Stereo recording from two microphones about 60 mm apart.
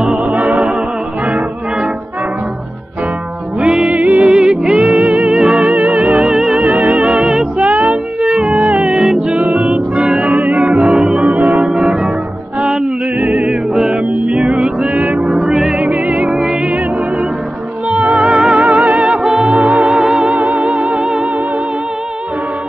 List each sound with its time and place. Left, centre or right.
0.0 s music: centre
3.5 s music: centre
4.8 s music: right
5.2 s music: centre
5.8 s music: right
6.1 s music: centre
7.5 s music: right
8.2 s music: centre
9.2 s music: centre
9.5 s music: centre
17.9 s music: centre
19.8 s music: centre
20.4 s music: right